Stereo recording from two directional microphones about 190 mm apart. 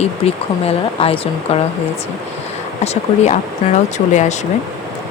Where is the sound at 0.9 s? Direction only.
30° left (ahead or behind).